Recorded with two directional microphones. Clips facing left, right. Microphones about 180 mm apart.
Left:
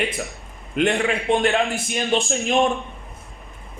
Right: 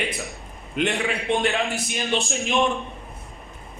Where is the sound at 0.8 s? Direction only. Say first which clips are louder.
Left 4 dB; 50° left (ahead or behind).